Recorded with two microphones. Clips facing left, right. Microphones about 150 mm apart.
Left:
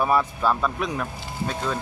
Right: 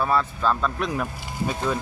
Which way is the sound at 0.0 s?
15° left (ahead or behind).